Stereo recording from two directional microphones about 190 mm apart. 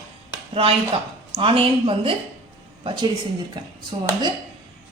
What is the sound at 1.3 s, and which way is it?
A woman's voice, 30° right (ahead or behind).